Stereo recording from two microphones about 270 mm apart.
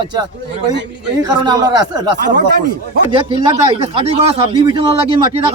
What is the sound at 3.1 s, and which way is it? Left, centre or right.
A man's voice, centre.